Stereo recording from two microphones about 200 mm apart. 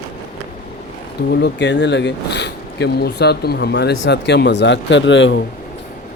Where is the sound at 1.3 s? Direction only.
60° left (ahead or behind).